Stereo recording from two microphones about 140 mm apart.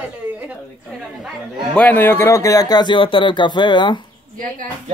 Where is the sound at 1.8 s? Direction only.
10° left (ahead or behind); by 4.0 s 35° left (ahead or behind).